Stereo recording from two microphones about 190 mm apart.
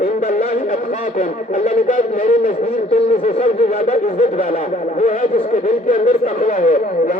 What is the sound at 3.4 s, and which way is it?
Speech, 35° left (ahead or behind).